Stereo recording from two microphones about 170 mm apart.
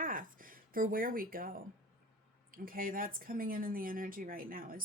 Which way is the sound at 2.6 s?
55° right (ahead or behind).